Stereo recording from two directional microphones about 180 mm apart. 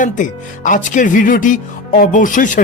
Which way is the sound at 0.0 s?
45° left (ahead or behind).